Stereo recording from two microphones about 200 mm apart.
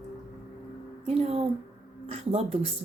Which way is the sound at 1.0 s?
30° right (ahead or behind).